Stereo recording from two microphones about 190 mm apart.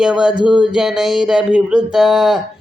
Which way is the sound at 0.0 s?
5° right (ahead or behind).